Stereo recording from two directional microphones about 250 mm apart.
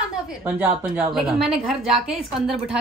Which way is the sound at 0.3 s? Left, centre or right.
Centre.